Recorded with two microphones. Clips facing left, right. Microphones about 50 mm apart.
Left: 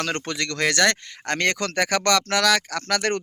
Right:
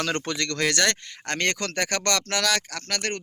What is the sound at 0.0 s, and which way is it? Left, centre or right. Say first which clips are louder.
Speech: even; left.